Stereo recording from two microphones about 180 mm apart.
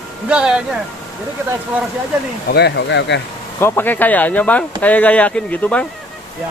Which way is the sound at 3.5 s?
10° left (ahead or behind).